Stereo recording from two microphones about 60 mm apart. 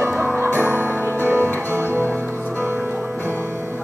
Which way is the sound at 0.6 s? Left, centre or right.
Right.